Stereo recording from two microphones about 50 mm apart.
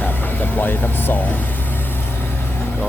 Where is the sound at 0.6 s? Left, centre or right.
Left.